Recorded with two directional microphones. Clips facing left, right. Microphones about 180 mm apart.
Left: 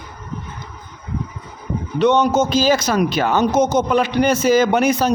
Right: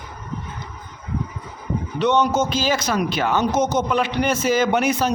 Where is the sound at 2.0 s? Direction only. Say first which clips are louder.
Left 4 dB; 40° left (ahead or behind).